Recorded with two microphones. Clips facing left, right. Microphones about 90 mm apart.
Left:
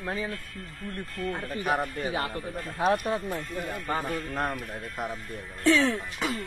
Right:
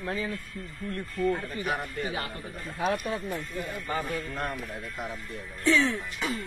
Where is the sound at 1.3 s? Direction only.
45° left (ahead or behind).